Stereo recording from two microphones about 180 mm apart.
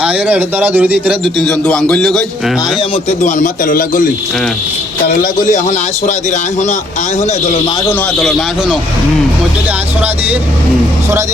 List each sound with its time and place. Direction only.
0.0 s a man's voice: 5° right (ahead or behind)
1.2 s a man's voice: 5° left (ahead or behind)
2.9 s a man's voice: 40° left (ahead or behind)
5.0 s a man's voice: 50° left (ahead or behind)
8.2 s a man's voice: 5° right (ahead or behind)